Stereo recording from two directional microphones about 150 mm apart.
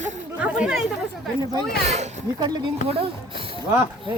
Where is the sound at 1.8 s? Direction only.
50° right (ahead or behind).